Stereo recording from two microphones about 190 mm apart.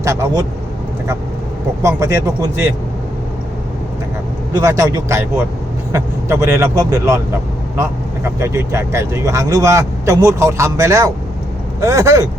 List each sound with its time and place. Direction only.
0.0 s speech: 15° right (ahead or behind)
1.8 s speech: 15° right (ahead or behind)
4.5 s speech: 15° right (ahead or behind)